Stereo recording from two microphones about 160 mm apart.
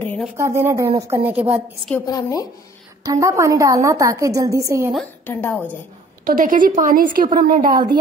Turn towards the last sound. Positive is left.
turn(degrees=-25)  # may be behind; listen again after turning